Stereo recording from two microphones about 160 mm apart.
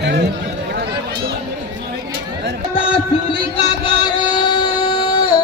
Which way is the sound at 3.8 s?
25° left (ahead or behind).